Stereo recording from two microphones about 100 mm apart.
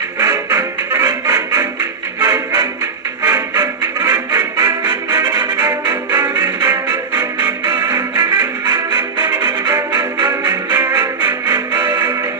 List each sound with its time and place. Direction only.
0.2 s music: 30° right (ahead or behind)
3.3 s quack: 35° right (ahead or behind)
5.6 s music: 35° right (ahead or behind)
8.2 s music: 40° right (ahead or behind)
8.9 s music: 30° right (ahead or behind)
10.5 s music: 25° right (ahead or behind)
11.5 s music: 40° right (ahead or behind)